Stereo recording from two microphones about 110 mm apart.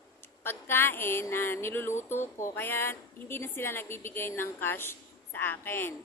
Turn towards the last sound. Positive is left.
turn(degrees=20)  # may be behind; listen again after turning